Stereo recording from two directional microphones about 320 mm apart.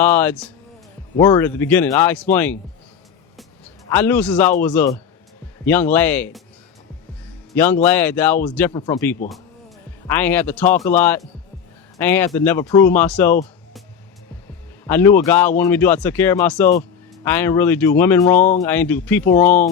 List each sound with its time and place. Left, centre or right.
0.0 s speech: centre
3.8 s speech: centre
7.5 s a man's voice: centre
14.8 s speech: centre